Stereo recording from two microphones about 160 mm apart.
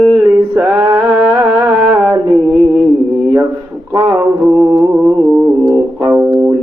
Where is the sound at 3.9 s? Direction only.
15° right (ahead or behind).